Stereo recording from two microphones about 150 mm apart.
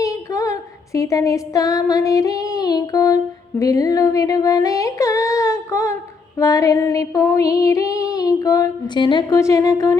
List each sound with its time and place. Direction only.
0.0 s female singing: 20° left (ahead or behind)
3.6 s a sound: 25° left (ahead or behind)
9.4 s humming: 20° left (ahead or behind)